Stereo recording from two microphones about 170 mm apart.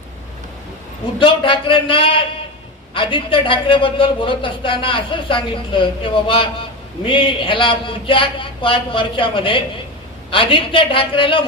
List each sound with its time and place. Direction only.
1.2 s a man's voice: 30° left (ahead or behind)